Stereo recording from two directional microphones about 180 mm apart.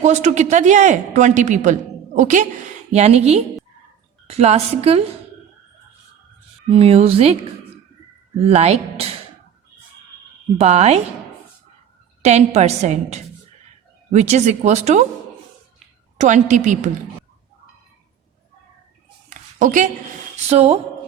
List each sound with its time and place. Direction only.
0.0 s a woman's voice: 40° right (ahead or behind)
6.7 s a woman's voice: 35° right (ahead or behind)
8.4 s a woman's voice: 35° right (ahead or behind)
10.6 s a woman's voice: 35° right (ahead or behind)
12.2 s a woman's voice: 40° right (ahead or behind)
16.1 s a woman's voice: 40° right (ahead or behind)
19.3 s a sound: 45° right (ahead or behind)
20.3 s speech: 35° right (ahead or behind)